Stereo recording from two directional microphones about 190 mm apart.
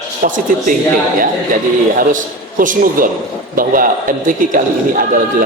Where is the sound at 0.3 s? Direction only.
45° right (ahead or behind).